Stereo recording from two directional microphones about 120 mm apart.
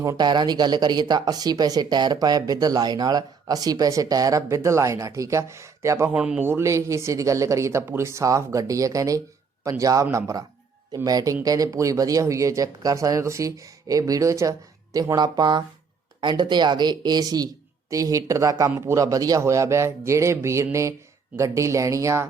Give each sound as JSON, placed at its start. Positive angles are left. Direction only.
{"t": 0.0, "sound": "speech", "side_deg": -35}
{"t": 6.1, "sound": "a man's voice", "side_deg": -10}
{"t": 6.5, "sound": "speech", "side_deg": -25}